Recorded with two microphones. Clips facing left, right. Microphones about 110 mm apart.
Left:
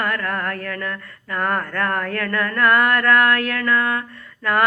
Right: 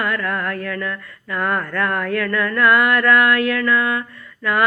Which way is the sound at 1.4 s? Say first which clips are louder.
Right 1 dB; 40° left (ahead or behind).